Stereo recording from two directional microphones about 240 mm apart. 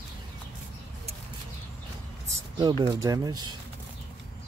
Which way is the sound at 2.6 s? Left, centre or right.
Centre.